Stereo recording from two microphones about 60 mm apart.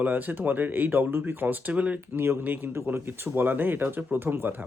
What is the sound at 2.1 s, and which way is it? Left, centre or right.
Speech, right.